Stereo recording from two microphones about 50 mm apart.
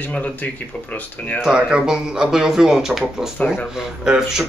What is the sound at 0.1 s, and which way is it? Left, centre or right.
Speech, left.